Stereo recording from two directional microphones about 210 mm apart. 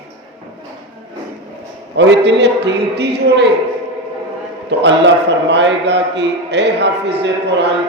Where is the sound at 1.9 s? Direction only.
55° right (ahead or behind).